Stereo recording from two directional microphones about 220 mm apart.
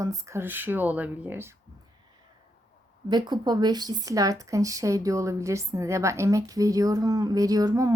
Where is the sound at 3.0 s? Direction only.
20° right (ahead or behind).